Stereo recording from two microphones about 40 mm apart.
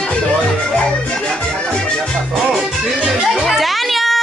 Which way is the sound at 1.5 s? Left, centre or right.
Centre.